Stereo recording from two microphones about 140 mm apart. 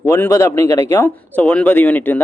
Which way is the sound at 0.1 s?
20° left (ahead or behind).